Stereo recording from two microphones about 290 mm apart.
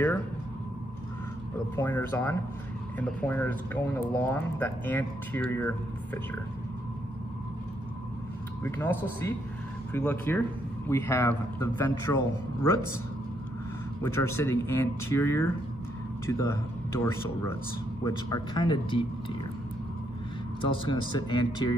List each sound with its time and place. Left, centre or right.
1.8 s speech: centre
8.6 s speech: centre
9.9 s speech: centre
14.0 s speech: centre
20.6 s speech: centre